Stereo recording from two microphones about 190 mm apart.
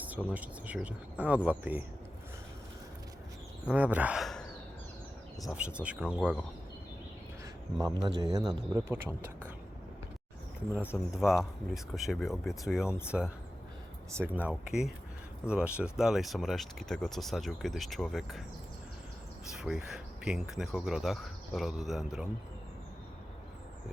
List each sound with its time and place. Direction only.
0.0 s a sound: 10° right (ahead or behind)
0.3 s speech: 5° right (ahead or behind)
3.7 s speech: 5° right (ahead or behind)
5.5 s speech: 5° right (ahead or behind)
8.0 s speech: 20° right (ahead or behind)
10.8 s speech: 5° right (ahead or behind)
19.5 s speech: 5° right (ahead or behind)